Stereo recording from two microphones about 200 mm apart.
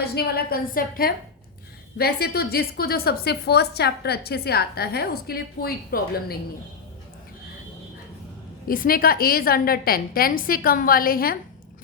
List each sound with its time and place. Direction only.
0.0 s a woman's voice: 50° left (ahead or behind)
8.6 s a woman's voice: 45° left (ahead or behind)